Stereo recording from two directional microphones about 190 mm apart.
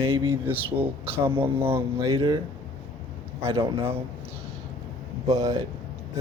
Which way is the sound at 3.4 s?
30° right (ahead or behind).